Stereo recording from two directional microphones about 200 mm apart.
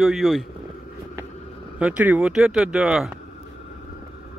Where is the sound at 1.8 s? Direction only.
5° right (ahead or behind).